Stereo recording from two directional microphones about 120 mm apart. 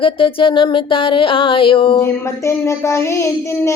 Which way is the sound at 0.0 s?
45° left (ahead or behind).